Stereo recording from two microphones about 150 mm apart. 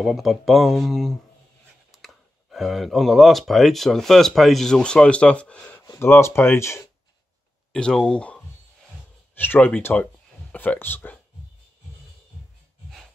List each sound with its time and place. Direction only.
0.0 s speech: centre (ahead or behind)
5.8 s speech: 20° left (ahead or behind)
7.7 s speech: 5° left (ahead or behind)
9.4 s speech: 10° left (ahead or behind)